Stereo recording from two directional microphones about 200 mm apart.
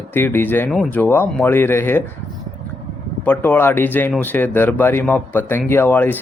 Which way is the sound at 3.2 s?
10° left (ahead or behind).